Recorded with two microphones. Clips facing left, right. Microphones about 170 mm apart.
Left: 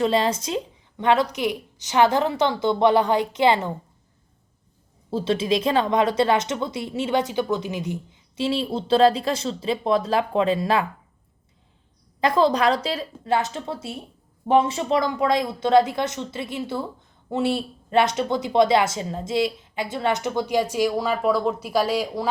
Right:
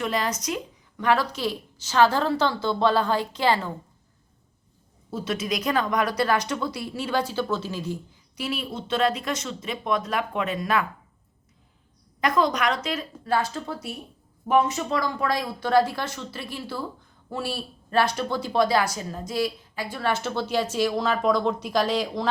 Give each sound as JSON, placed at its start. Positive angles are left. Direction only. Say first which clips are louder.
{"t": 0.0, "sound": "speech", "louder": "left 6 dB", "side_deg": 30}
{"t": 5.1, "sound": "speech", "louder": "left 6 dB", "side_deg": 30}
{"t": 12.2, "sound": "speech", "louder": "left 4 dB", "side_deg": 30}